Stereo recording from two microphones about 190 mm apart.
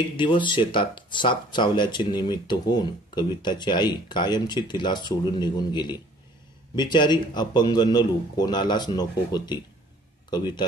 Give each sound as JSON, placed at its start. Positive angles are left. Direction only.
{"t": 0.2, "sound": "speech", "side_deg": 25}